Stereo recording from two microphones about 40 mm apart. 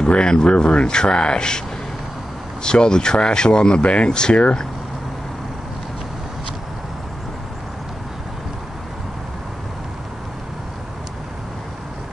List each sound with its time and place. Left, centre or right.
0.0 s speech: left
2.6 s speech: centre